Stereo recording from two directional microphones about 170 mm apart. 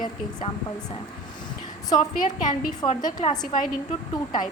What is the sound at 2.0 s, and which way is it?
Speech, 50° left (ahead or behind).